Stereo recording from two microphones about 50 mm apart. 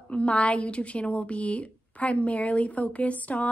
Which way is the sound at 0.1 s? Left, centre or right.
Left.